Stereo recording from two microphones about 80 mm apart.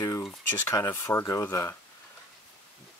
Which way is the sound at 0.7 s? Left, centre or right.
Left.